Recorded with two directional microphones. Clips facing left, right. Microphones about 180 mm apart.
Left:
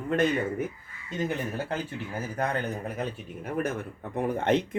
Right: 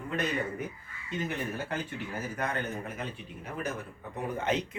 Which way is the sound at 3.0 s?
50° left (ahead or behind).